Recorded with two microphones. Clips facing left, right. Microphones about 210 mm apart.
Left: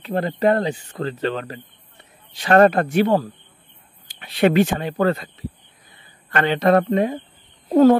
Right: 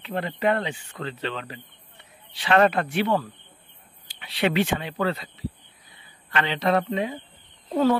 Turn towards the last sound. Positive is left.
turn(degrees=45)  # may be behind; listen again after turning